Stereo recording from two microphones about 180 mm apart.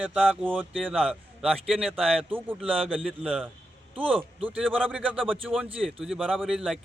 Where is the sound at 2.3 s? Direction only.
10° right (ahead or behind).